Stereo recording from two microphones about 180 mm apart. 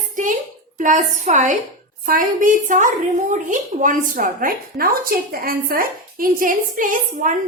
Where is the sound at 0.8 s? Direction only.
45° right (ahead or behind).